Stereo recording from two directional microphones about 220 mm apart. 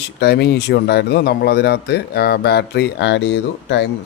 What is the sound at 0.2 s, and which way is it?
Speech, 50° left (ahead or behind).